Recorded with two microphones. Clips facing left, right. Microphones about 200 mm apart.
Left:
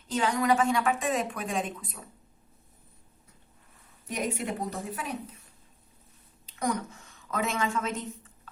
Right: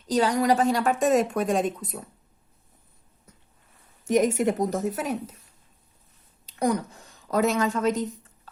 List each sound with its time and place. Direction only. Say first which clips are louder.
0.1 s a woman's voice: right 4 dB; 40° right (ahead or behind)
4.0 s a woman's voice: right 11 dB; 45° right (ahead or behind)
6.7 s a woman's voice: right 5 dB; 35° right (ahead or behind)